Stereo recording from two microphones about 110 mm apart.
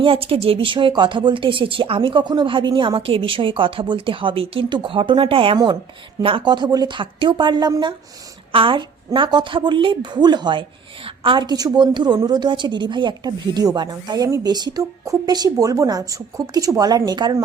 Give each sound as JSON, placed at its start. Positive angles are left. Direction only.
{"t": 0.0, "sound": "a woman's voice", "side_deg": -55}
{"t": 8.5, "sound": "a woman's voice", "side_deg": -55}